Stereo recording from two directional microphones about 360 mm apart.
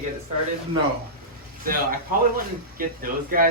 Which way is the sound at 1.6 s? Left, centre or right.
Right.